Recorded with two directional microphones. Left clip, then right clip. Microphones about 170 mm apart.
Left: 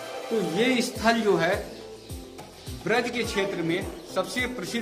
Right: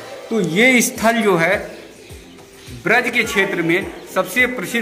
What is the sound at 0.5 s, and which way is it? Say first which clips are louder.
Speech: right 14 dB; 60° right (ahead or behind).